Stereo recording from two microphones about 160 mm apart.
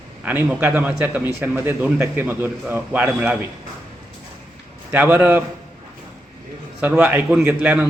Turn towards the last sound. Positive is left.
turn(degrees=-10)  # may be behind; listen again after turning